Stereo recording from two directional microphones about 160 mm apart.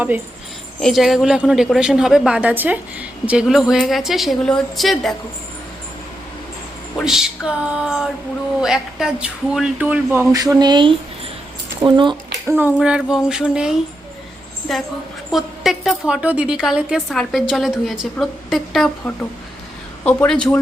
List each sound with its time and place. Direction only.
0.8 s speech: centre (ahead or behind)
7.0 s speech: 5° right (ahead or behind)
10.4 s speech: 25° right (ahead or behind)
12.5 s speech: 10° right (ahead or behind)
15.3 s speech: centre (ahead or behind)